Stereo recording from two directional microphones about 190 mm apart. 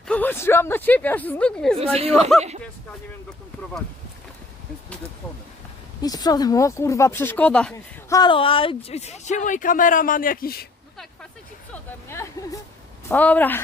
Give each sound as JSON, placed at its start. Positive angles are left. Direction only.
{"t": 0.1, "sound": "speech", "side_deg": 10}
{"t": 6.0, "sound": "speech", "side_deg": 20}
{"t": 8.1, "sound": "speech", "side_deg": 25}
{"t": 11.7, "sound": "speech", "side_deg": 10}